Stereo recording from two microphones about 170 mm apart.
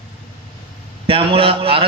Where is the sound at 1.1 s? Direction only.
35° right (ahead or behind).